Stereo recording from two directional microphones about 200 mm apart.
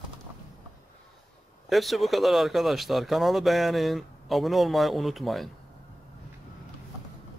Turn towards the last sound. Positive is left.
turn(degrees=0)  # may be behind; listen again after turning